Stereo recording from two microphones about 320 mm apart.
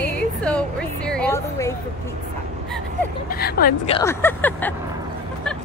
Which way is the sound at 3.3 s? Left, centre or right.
Left.